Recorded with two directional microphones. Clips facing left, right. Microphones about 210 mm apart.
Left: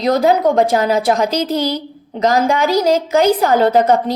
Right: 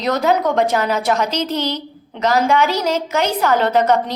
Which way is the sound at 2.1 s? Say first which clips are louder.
Left 1 dB; 40° left (ahead or behind).